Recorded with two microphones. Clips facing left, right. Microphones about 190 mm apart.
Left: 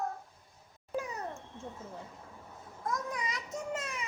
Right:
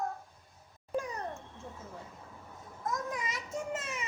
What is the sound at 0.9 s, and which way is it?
Cat, 5° left (ahead or behind).